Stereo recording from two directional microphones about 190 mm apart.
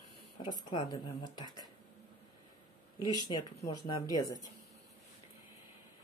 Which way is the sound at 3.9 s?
20° left (ahead or behind).